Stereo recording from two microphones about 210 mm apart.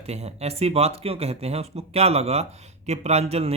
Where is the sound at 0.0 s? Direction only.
30° right (ahead or behind).